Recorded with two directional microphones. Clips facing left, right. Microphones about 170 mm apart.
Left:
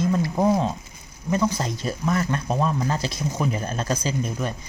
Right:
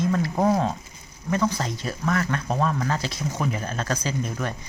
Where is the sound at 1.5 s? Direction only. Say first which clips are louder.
Left 2 dB; 10° left (ahead or behind).